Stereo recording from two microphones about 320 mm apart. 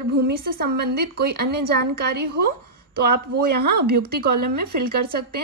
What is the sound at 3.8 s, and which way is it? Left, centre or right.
Speech, right.